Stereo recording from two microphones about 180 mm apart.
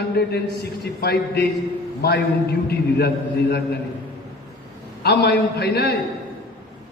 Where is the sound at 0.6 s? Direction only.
60° left (ahead or behind).